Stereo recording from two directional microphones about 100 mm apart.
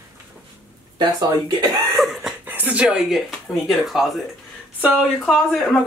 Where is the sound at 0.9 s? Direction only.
45° right (ahead or behind).